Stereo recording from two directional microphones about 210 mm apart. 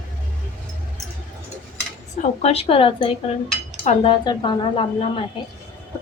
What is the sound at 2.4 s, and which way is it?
A woman's voice, 30° left (ahead or behind).